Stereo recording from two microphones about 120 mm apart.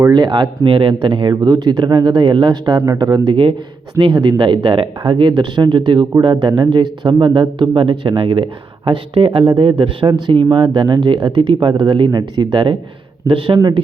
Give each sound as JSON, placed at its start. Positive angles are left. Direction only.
{"t": 0.1, "sound": "speech", "side_deg": -40}